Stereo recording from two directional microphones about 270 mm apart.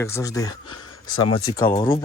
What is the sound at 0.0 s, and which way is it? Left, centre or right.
Speech, centre.